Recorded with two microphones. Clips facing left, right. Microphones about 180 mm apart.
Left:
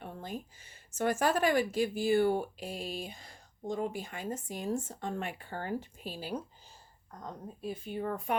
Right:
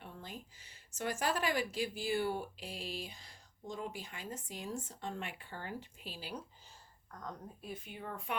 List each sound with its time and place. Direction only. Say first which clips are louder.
0.0 s speech: left 8 dB; 50° left (ahead or behind)
7.1 s a woman's voice: left 3 dB; 25° left (ahead or behind); by 8.4 s 45° left (ahead or behind)